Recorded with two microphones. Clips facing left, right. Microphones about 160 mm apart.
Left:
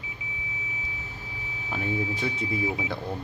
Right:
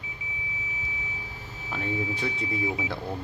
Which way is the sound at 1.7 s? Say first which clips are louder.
Left 1 dB; centre (ahead or behind).